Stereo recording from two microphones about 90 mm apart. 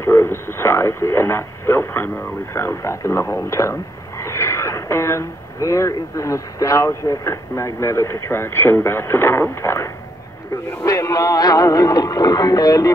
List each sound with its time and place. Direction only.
0.0 s speech: 30° left (ahead or behind); by 12.9 s 45° left (ahead or behind)